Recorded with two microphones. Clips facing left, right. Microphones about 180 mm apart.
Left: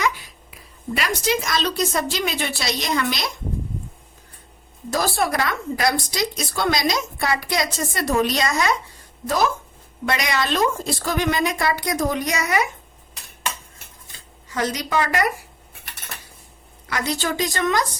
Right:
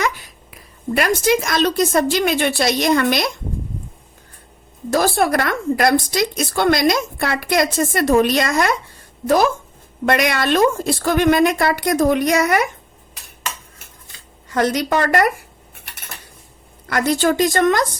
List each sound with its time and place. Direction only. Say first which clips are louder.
0.5 s a woman's voice: right 7 dB; 50° right (ahead or behind)
4.9 s a woman's voice: right 5 dB; 55° right (ahead or behind)
14.5 s a woman's voice: right 5 dB; 55° right (ahead or behind)
16.9 s a woman's voice: right 8 dB; 50° right (ahead or behind)